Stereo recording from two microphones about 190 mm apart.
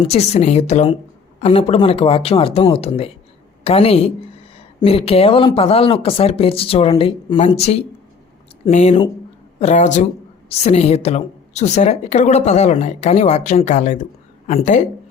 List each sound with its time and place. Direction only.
0.1 s a woman's voice: 35° left (ahead or behind)